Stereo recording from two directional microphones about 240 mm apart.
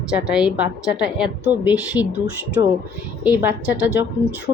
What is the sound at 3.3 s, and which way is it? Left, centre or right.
A woman's voice, centre.